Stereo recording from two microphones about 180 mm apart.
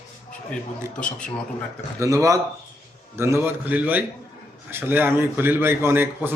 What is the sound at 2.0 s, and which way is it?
A man's voice, 15° right (ahead or behind).